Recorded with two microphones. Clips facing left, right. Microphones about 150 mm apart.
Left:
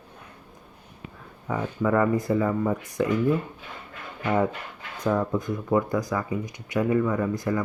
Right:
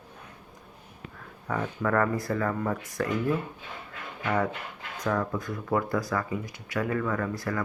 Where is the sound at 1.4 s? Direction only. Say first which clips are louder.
Left 3 dB; 15° left (ahead or behind).